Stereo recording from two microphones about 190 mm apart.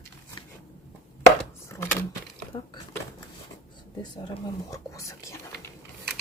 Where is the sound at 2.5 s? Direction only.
25° left (ahead or behind).